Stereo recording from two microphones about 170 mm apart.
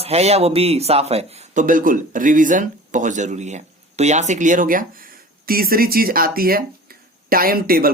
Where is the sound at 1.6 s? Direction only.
50° right (ahead or behind).